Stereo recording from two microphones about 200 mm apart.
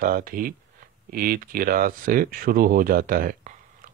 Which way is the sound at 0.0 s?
45° right (ahead or behind).